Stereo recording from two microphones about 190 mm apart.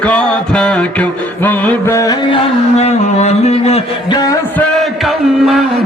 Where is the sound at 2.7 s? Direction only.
35° left (ahead or behind).